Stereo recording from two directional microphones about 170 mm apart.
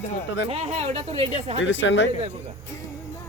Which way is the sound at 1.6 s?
90° left.